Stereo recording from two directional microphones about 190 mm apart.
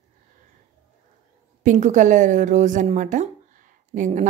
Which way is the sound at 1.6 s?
40° right (ahead or behind).